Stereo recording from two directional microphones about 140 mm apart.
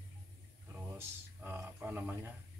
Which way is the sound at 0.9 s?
15° right (ahead or behind).